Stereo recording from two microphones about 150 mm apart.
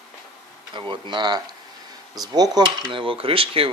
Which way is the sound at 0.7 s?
30° right (ahead or behind).